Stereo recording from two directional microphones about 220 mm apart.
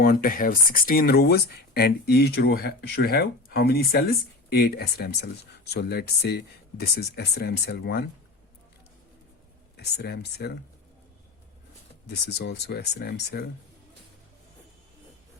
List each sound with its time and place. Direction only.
0.0 s speech: 40° left (ahead or behind)
9.7 s speech: 50° left (ahead or behind)
12.0 s speech: 45° left (ahead or behind)